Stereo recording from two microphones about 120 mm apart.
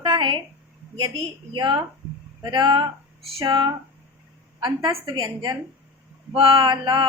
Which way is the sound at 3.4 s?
45° right (ahead or behind).